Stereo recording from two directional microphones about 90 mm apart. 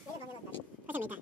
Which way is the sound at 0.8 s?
20° right (ahead or behind).